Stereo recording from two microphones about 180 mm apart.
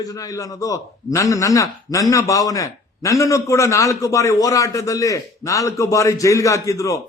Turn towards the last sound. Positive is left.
turn(degrees=15)  # may be behind; listen again after turning